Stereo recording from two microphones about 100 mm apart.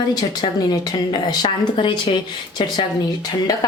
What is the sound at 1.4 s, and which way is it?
A woman's voice, 55° left (ahead or behind).